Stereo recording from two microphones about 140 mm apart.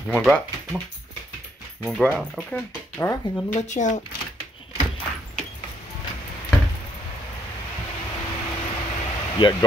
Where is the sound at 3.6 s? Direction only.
60° left (ahead or behind).